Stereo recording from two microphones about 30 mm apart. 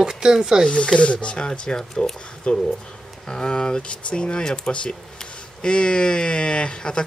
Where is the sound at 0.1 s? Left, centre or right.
Centre.